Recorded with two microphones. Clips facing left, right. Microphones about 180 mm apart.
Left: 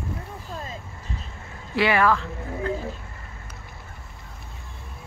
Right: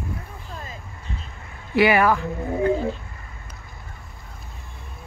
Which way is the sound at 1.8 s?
20° right (ahead or behind).